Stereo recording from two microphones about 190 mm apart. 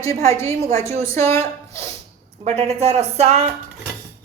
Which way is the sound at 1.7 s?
35° right (ahead or behind).